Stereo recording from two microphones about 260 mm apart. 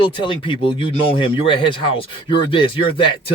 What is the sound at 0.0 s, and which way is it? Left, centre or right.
Speech, centre.